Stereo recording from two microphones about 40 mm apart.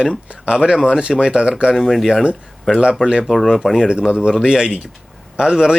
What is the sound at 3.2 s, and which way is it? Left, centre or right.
Speech, centre.